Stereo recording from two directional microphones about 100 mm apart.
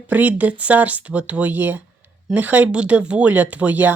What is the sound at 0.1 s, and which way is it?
Speech, 15° right (ahead or behind).